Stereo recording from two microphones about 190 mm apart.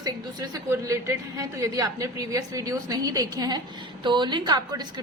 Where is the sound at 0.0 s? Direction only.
20° right (ahead or behind).